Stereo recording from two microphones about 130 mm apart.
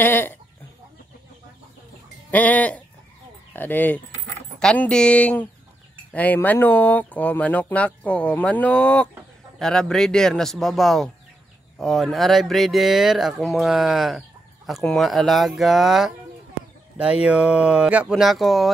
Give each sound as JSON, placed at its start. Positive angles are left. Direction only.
{"t": 0.0, "sound": "speech", "side_deg": 15}
{"t": 2.3, "sound": "speech", "side_deg": 10}